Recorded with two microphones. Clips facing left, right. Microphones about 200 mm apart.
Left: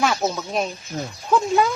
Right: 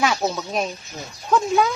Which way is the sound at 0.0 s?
Centre (ahead or behind).